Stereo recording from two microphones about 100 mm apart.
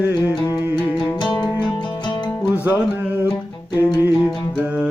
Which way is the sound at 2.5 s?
20° right (ahead or behind).